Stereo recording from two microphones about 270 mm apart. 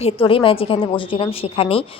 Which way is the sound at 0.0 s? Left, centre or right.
Centre.